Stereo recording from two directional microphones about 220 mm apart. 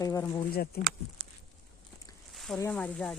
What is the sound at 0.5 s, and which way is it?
Speech, 45° left (ahead or behind).